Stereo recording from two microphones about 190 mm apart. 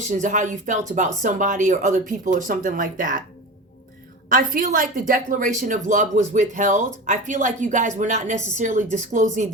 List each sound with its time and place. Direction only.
0.1 s speech: 40° right (ahead or behind)
4.3 s a woman's voice: 45° right (ahead or behind)